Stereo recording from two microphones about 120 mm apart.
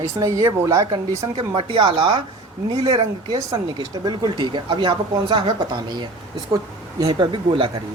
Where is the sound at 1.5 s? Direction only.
45° right (ahead or behind).